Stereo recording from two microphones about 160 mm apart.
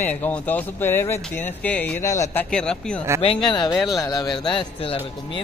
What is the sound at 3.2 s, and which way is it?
Speech, 25° left (ahead or behind).